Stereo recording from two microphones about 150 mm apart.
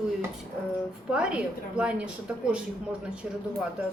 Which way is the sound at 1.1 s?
5° right (ahead or behind).